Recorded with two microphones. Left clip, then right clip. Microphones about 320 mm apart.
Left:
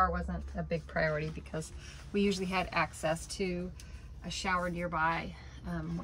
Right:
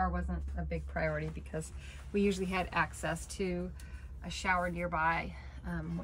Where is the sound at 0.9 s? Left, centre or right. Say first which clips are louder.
Left 3 dB; left.